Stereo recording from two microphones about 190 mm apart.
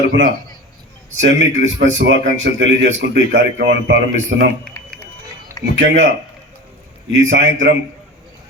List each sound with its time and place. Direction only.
1.1 s a man's voice: 75° right (ahead or behind)
4.6 s a sound: 10° left (ahead or behind)
5.7 s a man's voice: 70° right (ahead or behind)
7.1 s a man's voice: 75° right (ahead or behind)